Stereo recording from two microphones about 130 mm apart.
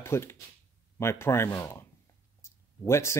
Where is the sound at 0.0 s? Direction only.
20° left (ahead or behind).